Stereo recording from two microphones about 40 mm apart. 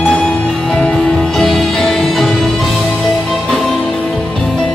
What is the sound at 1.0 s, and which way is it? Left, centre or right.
Music, centre.